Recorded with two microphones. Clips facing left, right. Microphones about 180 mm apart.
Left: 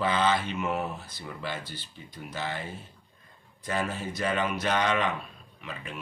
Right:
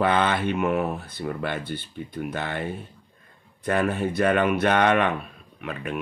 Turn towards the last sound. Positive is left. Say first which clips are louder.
# right 9 dB
turn(degrees=-60)  # may be behind; listen again after turning